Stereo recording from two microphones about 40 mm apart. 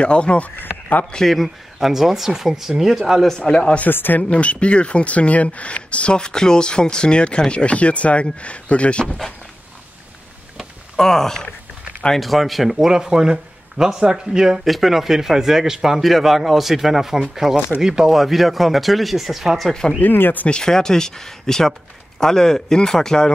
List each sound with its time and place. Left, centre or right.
0.0 s speech: left
1.2 s speech: centre
3.9 s speech: left
4.2 s speech: left
6.1 s speech: centre
11.0 s speech: centre
12.2 s speech: centre
12.7 s speech: centre
14.6 s speech: centre
18.1 s speech: centre
20.0 s speech: left
20.4 s speech: centre